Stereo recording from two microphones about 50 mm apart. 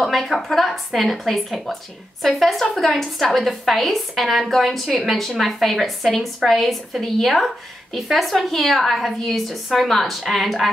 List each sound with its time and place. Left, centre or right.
0.0 s a woman's voice: centre